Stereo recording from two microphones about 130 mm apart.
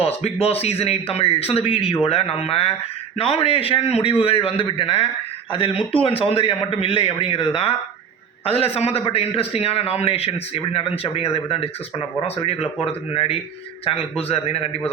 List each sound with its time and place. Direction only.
0.0 s a man's voice: 50° left (ahead or behind)